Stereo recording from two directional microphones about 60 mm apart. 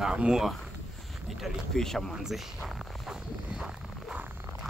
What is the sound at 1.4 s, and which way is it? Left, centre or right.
Speech, centre.